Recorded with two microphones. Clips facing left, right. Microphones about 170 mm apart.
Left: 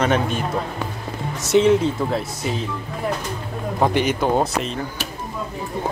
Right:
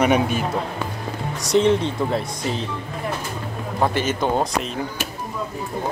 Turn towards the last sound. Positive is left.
turn(degrees=5)  # may be behind; listen again after turning